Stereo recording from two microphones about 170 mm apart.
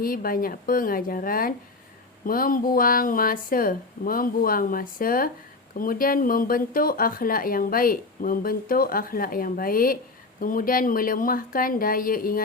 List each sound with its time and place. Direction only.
0.0 s speech: 55° left (ahead or behind)